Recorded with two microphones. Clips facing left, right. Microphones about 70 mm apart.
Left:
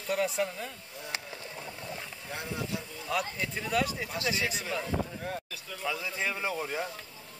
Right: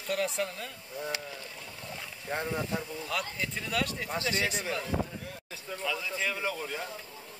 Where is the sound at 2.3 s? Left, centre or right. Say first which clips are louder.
Right 4 dB; right.